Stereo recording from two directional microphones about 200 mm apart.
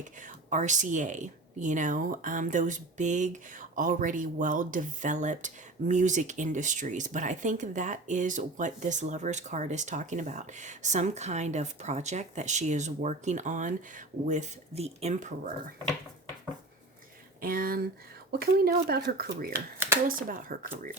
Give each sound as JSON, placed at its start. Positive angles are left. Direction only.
{"t": 0.2, "sound": "speech", "side_deg": -35}
{"t": 17.4, "sound": "speech", "side_deg": -45}